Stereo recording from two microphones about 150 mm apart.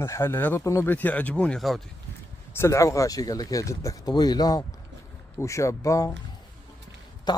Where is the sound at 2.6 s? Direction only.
20° left (ahead or behind).